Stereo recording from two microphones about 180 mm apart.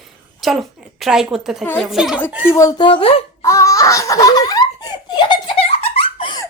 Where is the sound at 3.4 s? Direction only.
15° left (ahead or behind).